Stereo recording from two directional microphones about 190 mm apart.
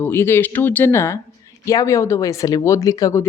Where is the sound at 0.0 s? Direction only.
10° left (ahead or behind).